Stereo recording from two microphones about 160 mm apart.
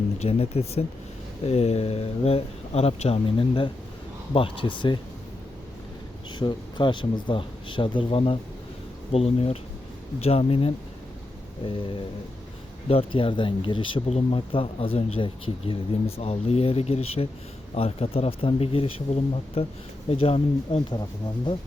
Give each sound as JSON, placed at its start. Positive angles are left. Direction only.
{"t": 0.2, "sound": "speech", "side_deg": 40}
{"t": 6.4, "sound": "speech", "side_deg": 25}
{"t": 12.9, "sound": "speech", "side_deg": 35}